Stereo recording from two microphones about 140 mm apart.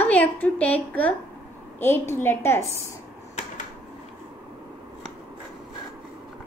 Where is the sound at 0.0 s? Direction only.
10° left (ahead or behind).